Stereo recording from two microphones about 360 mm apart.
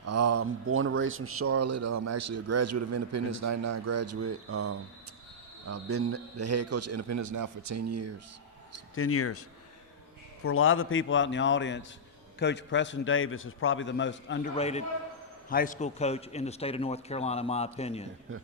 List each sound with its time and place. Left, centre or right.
0.0 s speech: right
9.0 s a man's voice: left
10.4 s a man's voice: left
14.5 s a man's voice: centre